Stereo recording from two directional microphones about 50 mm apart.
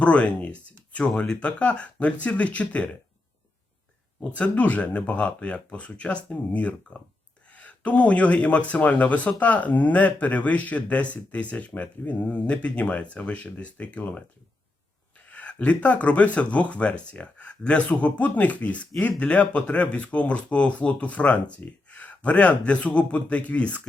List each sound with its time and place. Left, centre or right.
0.0 s speech: left
4.2 s speech: left
15.3 s speech: left